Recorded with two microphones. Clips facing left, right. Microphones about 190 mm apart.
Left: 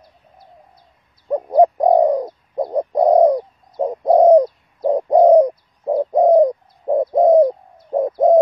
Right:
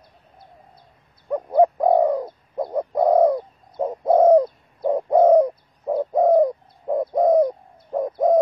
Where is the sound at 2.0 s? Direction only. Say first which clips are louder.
Left 4 dB; 15° left (ahead or behind).